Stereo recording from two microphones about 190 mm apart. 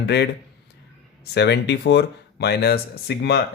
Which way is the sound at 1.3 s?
60° left (ahead or behind).